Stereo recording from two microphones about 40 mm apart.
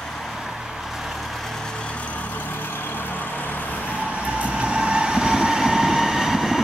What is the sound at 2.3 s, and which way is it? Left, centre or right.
Vehicle, left.